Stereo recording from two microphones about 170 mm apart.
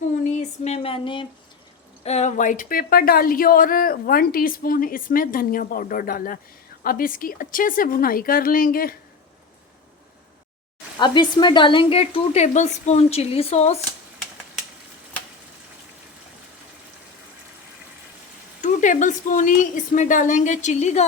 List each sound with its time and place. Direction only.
0.3 s a sound: 40° left (ahead or behind)
2.0 s a woman's voice: 40° left (ahead or behind); by 9.0 s 60° left (ahead or behind)
10.9 s a woman's voice: 25° left (ahead or behind)
18.6 s a woman's voice: 45° left (ahead or behind)